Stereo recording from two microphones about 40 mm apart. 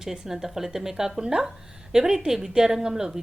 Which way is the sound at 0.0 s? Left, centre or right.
Centre.